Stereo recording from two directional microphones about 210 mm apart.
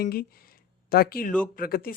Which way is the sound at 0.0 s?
45° left (ahead or behind).